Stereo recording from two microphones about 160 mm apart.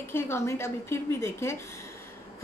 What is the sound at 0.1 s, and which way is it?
A woman's voice, 15° left (ahead or behind).